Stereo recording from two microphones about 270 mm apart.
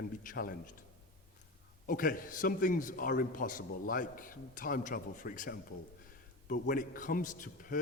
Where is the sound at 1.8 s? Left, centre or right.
Left.